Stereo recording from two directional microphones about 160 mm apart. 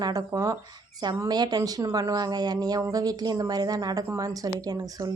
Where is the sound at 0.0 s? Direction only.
25° right (ahead or behind).